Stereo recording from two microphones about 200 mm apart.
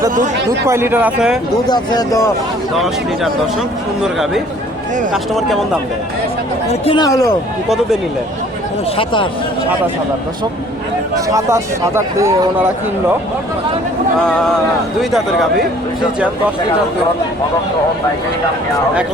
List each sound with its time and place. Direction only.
0.7 s speech: 10° right (ahead or behind)
1.7 s speech: 20° left (ahead or behind)
2.7 s speech: centre (ahead or behind)
5.1 s speech: centre (ahead or behind)
6.8 s speech: 20° left (ahead or behind)
9.0 s speech: 25° left (ahead or behind)
11.3 s speech: 15° right (ahead or behind)
15.1 s speech: centre (ahead or behind)